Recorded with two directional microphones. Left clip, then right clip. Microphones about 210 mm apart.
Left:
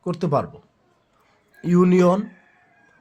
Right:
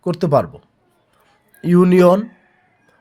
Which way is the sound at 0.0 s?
30° right (ahead or behind).